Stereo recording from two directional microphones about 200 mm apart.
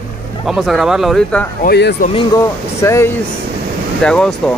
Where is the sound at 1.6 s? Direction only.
55° left (ahead or behind).